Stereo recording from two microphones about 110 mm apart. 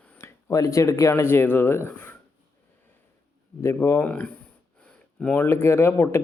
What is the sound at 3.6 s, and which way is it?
Speech, 25° left (ahead or behind).